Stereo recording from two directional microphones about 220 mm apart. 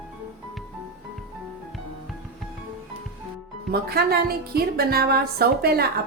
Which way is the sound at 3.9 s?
45° right (ahead or behind).